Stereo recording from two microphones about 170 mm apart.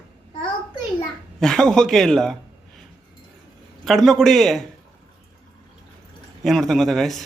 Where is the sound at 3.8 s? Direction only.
Centre (ahead or behind).